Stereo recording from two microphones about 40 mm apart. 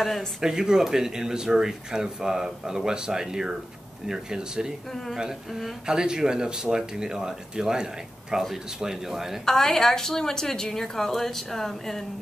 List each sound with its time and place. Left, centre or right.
0.4 s speech: centre
5.9 s speech: centre
9.4 s a woman's voice: centre